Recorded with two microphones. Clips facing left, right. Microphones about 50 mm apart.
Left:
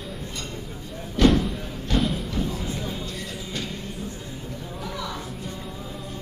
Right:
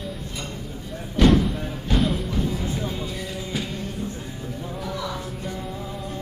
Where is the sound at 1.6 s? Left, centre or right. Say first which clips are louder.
Right 3 dB; centre.